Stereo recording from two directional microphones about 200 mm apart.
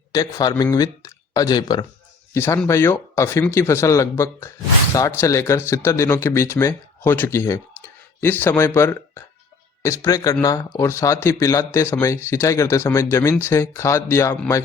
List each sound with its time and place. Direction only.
0.1 s speech: 15° left (ahead or behind)